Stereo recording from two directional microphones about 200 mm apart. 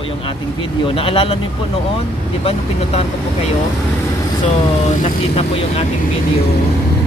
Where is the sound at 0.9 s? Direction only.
25° left (ahead or behind).